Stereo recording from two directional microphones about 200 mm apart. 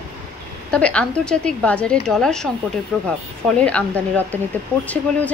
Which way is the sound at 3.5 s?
5° left (ahead or behind).